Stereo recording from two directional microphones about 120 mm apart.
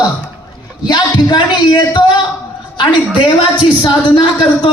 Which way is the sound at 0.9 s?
35° left (ahead or behind).